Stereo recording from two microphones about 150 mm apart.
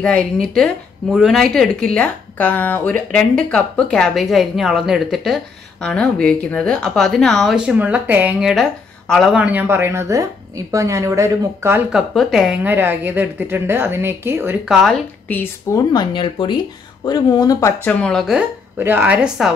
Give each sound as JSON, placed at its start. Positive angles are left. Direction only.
{"t": 0.0, "sound": "a woman's voice", "side_deg": 5}
{"t": 11.9, "sound": "speech", "side_deg": 0}
{"t": 14.7, "sound": "a woman's voice", "side_deg": 0}
{"t": 15.2, "sound": "speech", "side_deg": 10}
{"t": 15.9, "sound": "speech", "side_deg": 30}
{"t": 17.8, "sound": "a woman's voice", "side_deg": 5}
{"t": 18.8, "sound": "speech", "side_deg": -15}